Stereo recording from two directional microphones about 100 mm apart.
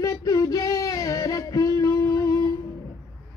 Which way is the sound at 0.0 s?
35° left (ahead or behind).